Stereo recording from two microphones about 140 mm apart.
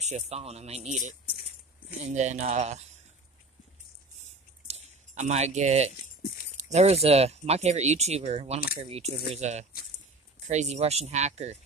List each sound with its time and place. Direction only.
0.0 s speech: 50° right (ahead or behind)
4.6 s a sound: 50° right (ahead or behind)
6.5 s speech: 50° right (ahead or behind)